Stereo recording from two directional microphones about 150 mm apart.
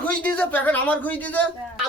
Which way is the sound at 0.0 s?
10° left (ahead or behind).